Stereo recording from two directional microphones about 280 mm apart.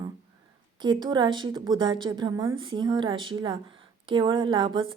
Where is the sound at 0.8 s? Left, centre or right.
Centre.